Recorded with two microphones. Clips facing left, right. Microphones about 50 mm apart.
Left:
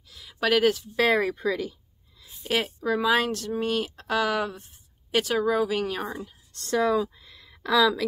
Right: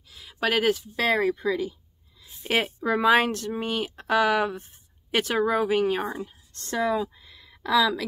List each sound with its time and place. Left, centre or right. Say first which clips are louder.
0.1 s a sound: left 2 dB; centre
0.9 s speech: left 1 dB; centre
2.4 s speech: right 1 dB; right
5.9 s speech: right 3 dB; centre